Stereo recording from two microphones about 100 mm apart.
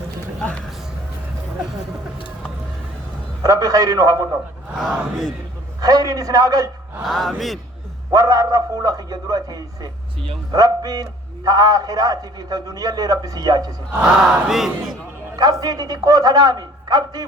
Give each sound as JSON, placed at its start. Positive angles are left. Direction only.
{"t": 3.4, "sound": "a man's voice", "side_deg": -35}
{"t": 4.8, "sound": "speech", "side_deg": 0}
{"t": 5.8, "sound": "a man's voice", "side_deg": -40}
{"t": 7.0, "sound": "speech", "side_deg": 0}
{"t": 8.1, "sound": "a man's voice", "side_deg": -40}
{"t": 13.9, "sound": "battle cry", "side_deg": -10}
{"t": 14.4, "sound": "speech", "side_deg": -5}
{"t": 15.6, "sound": "a man's voice", "side_deg": -40}